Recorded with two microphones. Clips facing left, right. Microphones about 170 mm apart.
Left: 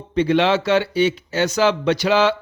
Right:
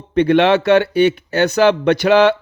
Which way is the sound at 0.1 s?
60° right (ahead or behind).